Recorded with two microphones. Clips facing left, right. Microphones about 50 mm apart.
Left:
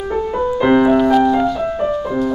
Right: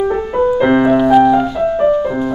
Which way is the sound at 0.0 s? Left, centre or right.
Centre.